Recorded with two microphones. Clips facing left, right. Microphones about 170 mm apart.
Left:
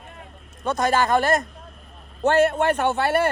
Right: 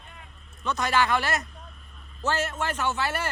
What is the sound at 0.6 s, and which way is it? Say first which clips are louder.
A man's voice: left 4 dB; 50° left (ahead or behind).